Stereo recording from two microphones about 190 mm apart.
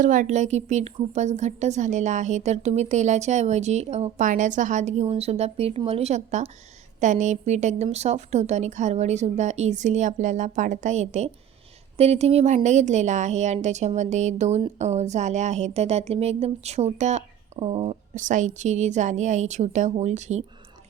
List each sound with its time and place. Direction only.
0.0 s a woman's voice: 40° right (ahead or behind)